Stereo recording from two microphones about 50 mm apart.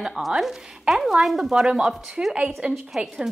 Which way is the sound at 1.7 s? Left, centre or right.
Centre.